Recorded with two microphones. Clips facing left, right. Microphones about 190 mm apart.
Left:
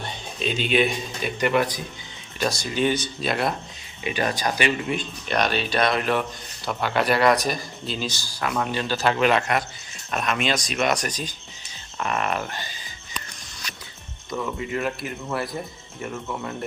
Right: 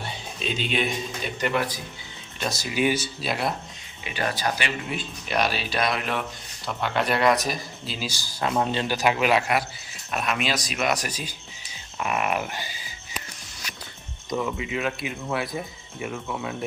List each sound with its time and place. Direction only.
0.0 s a sound: centre (ahead or behind)
1.4 s speech: 15° left (ahead or behind)
2.4 s speech: 5° right (ahead or behind)
4.0 s speech: 15° left (ahead or behind)
4.9 s speech: 5° right (ahead or behind)
8.4 s a man's voice: 25° right (ahead or behind); by 12.9 s 10° right (ahead or behind)
14.3 s speech: 5° right (ahead or behind)